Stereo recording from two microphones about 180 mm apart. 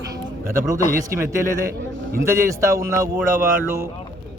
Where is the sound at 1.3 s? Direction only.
15° right (ahead or behind).